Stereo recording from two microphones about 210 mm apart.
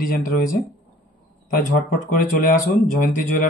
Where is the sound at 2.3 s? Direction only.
45° left (ahead or behind).